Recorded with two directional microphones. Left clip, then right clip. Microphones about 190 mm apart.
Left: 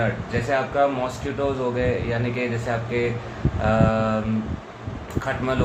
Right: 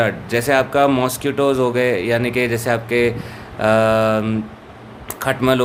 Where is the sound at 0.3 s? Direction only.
65° right (ahead or behind).